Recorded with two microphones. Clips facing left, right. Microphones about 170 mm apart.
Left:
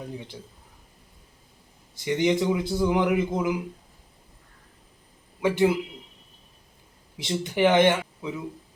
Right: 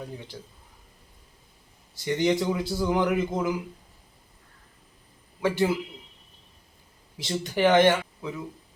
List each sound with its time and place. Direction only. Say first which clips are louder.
2.0 s a man's voice: left 1 dB; 15° left (ahead or behind)
5.4 s a man's voice: left 3 dB; 15° left (ahead or behind)
7.3 s a man's voice: left 1 dB; 20° left (ahead or behind)